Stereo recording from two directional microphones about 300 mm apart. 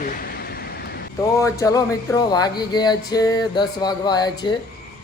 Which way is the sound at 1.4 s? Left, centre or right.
Centre.